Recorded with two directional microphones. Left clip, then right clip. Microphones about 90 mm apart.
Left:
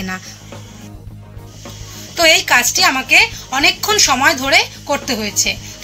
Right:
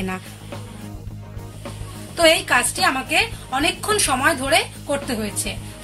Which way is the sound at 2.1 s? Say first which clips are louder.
Left 5 dB; 20° left (ahead or behind).